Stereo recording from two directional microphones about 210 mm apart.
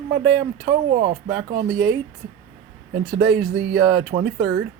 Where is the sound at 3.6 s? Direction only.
55° right (ahead or behind).